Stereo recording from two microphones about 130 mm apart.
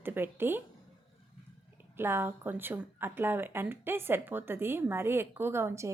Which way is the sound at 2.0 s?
20° right (ahead or behind).